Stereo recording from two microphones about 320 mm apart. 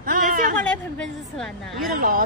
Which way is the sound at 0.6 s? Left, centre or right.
Centre.